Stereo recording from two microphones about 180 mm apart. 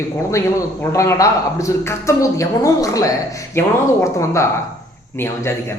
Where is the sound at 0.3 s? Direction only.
15° left (ahead or behind).